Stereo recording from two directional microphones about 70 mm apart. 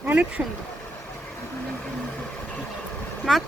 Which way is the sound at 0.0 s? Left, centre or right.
Right.